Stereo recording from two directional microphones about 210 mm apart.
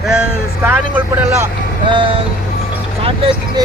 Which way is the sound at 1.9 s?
25° right (ahead or behind).